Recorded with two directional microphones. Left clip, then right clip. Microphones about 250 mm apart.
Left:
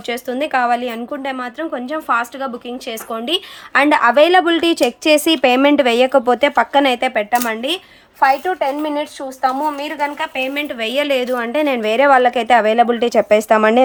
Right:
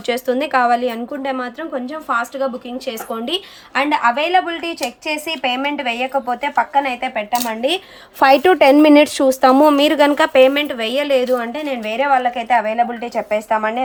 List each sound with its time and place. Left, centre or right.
0.1 s a woman's voice: centre
3.8 s a woman's voice: centre
7.5 s a woman's voice: centre
9.0 s speech: right
10.4 s a woman's voice: centre; by 13.8 s left